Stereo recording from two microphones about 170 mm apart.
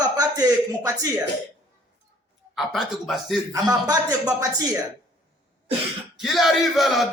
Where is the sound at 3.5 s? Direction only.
20° right (ahead or behind).